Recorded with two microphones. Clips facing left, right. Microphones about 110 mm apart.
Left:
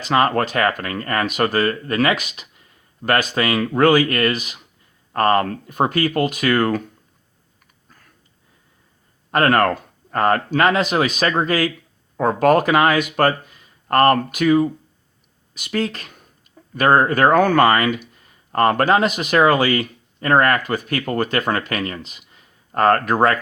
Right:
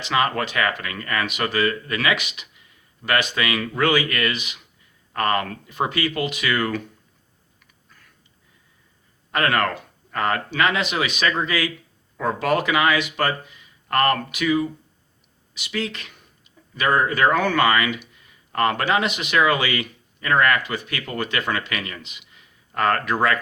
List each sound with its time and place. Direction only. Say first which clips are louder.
0.0 s speech: left 5 dB; 40° left (ahead or behind)
9.3 s speech: left 5 dB; 40° left (ahead or behind)